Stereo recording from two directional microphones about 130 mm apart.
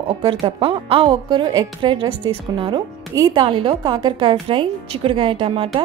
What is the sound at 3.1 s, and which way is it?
Speech, 30° right (ahead or behind).